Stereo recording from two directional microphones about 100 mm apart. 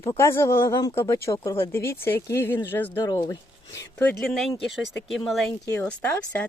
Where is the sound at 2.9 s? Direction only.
45° left (ahead or behind).